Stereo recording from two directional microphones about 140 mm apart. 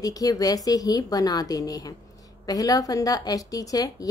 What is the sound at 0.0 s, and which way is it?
A woman's voice, 25° left (ahead or behind).